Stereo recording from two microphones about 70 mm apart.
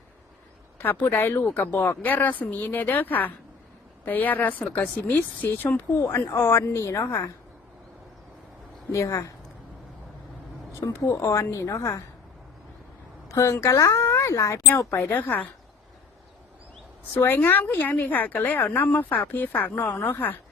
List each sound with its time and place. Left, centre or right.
0.8 s speech: left
6.3 s a woman's voice: left
8.9 s a woman's voice: left
10.8 s a woman's voice: left
13.2 s a sound: left
13.5 s a woman's voice: left
15.1 s speech: left
17.2 s speech: left